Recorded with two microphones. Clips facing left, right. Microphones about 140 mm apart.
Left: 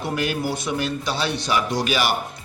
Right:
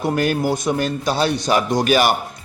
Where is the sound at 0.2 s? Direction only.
45° right (ahead or behind).